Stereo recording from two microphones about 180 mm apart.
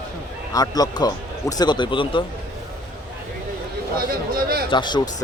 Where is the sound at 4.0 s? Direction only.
55° right (ahead or behind).